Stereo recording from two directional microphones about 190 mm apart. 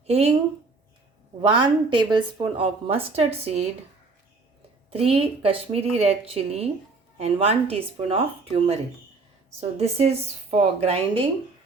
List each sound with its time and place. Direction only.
0.1 s speech: 35° right (ahead or behind)
1.4 s a woman's voice: 25° right (ahead or behind)
4.9 s speech: 30° right (ahead or behind)